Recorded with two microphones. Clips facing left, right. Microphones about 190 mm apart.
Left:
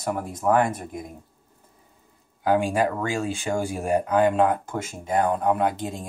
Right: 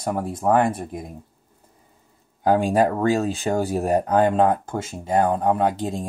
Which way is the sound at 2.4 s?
35° right (ahead or behind).